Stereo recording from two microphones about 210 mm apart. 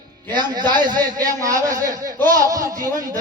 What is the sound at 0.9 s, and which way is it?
A man's voice, 20° right (ahead or behind).